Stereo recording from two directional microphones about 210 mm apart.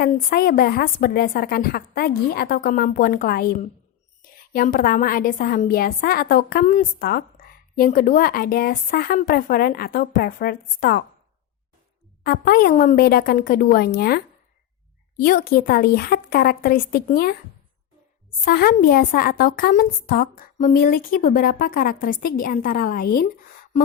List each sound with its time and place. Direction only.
0.0 s a woman's voice: 45° left (ahead or behind)
12.2 s a woman's voice: 45° left (ahead or behind)
15.2 s a woman's voice: 45° left (ahead or behind)
18.4 s a woman's voice: 45° left (ahead or behind)